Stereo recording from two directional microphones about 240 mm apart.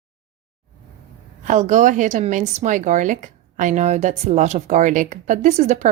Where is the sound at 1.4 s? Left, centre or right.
Right.